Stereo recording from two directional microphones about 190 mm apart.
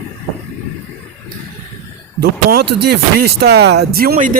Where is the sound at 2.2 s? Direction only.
55° right (ahead or behind).